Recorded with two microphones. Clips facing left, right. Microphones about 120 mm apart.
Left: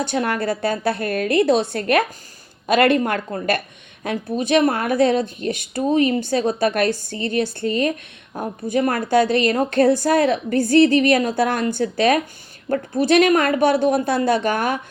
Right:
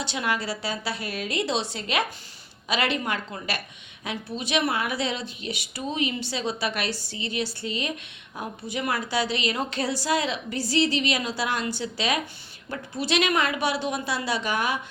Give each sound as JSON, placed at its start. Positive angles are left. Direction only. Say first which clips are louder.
{"t": 0.0, "sound": "a woman's voice", "louder": "left 7 dB", "side_deg": 50}